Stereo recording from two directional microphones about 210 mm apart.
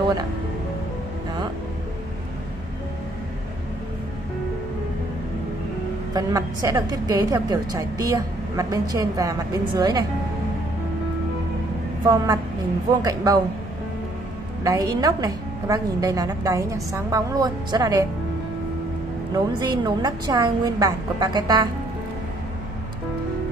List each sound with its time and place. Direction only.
6.1 s a woman's voice: 15° right (ahead or behind)
12.0 s a woman's voice: 20° right (ahead or behind)
14.6 s a woman's voice: 15° right (ahead or behind)
19.3 s a woman's voice: 20° right (ahead or behind)